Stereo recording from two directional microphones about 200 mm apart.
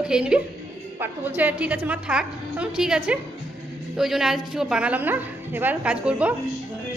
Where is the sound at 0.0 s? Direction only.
5° right (ahead or behind).